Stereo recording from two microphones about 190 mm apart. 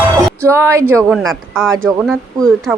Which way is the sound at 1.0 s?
Centre (ahead or behind).